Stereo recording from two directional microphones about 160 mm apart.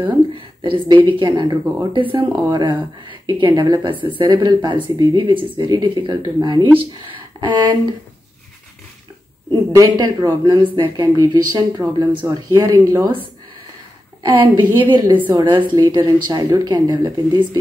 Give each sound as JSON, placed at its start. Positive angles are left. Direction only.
{"t": 0.0, "sound": "speech", "side_deg": -30}
{"t": 9.5, "sound": "speech", "side_deg": -25}
{"t": 14.2, "sound": "speech", "side_deg": -30}